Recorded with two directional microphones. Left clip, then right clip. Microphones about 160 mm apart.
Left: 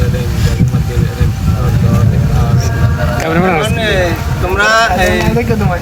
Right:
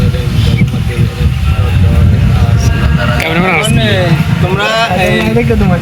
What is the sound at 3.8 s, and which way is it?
Speech, 5° right (ahead or behind).